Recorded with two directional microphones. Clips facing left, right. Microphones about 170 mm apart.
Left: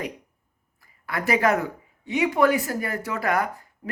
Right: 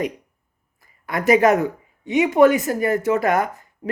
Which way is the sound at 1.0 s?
20° right (ahead or behind).